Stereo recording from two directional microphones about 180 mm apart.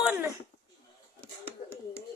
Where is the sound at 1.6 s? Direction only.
55° left (ahead or behind).